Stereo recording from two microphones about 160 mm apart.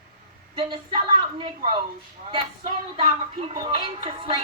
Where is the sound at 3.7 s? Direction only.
35° right (ahead or behind).